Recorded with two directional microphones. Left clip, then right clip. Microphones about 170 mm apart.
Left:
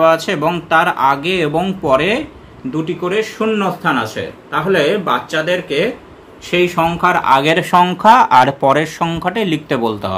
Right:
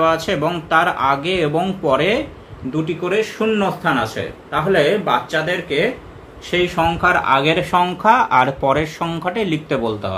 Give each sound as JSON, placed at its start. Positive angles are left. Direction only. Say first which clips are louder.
{"t": 0.0, "sound": "speech", "louder": "left 4 dB", "side_deg": 20}